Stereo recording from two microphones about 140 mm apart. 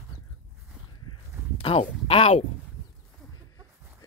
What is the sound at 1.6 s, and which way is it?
Speech, 40° left (ahead or behind).